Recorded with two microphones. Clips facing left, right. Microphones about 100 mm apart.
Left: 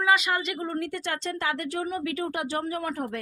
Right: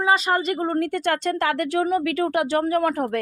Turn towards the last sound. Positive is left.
turn(degrees=-65)  # may be behind; listen again after turning